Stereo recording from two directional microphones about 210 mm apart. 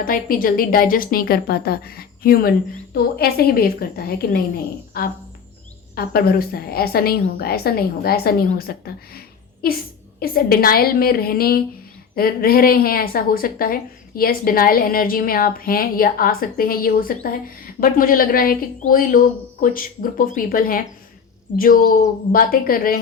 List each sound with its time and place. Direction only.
0.0 s a woman's voice: 45° left (ahead or behind)
9.1 s a sound: 45° left (ahead or behind)
10.2 s a woman's voice: 45° left (ahead or behind)